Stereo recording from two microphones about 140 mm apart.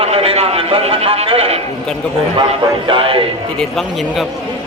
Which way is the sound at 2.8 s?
40° right (ahead or behind).